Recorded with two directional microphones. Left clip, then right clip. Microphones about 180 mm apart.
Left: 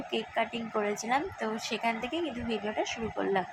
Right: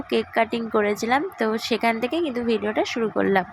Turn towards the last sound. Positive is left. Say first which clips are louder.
# right 9 dB
turn(degrees=-25)  # may be behind; listen again after turning